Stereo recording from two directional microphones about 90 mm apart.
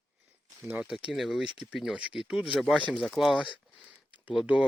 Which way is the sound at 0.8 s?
10° right (ahead or behind).